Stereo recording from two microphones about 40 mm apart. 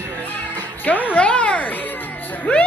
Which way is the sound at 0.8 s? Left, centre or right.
Left.